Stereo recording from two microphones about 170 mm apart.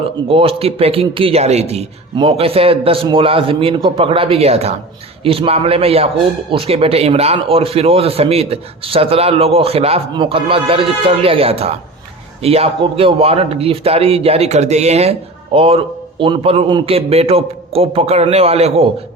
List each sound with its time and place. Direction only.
0.3 s a man's voice: 35° right (ahead or behind)